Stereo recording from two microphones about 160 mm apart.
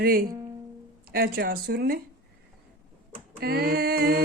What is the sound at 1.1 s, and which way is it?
Speech, 70° right (ahead or behind).